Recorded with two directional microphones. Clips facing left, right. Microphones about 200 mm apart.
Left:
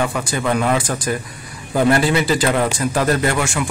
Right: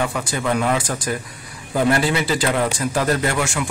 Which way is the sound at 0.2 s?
50° left (ahead or behind).